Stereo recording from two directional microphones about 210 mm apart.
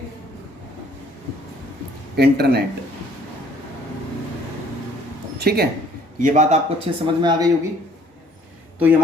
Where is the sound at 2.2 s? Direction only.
50° right (ahead or behind).